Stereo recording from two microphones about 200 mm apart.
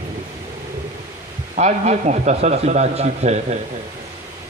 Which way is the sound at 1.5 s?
35° right (ahead or behind).